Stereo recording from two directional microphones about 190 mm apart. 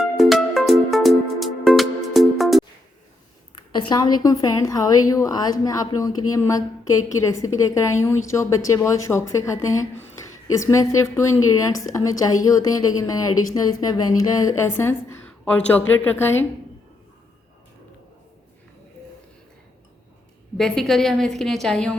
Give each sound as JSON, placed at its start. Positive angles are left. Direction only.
{"t": 0.0, "sound": "music", "side_deg": 0}
{"t": 3.8, "sound": "a woman's voice", "side_deg": 20}
{"t": 20.6, "sound": "a woman's voice", "side_deg": 0}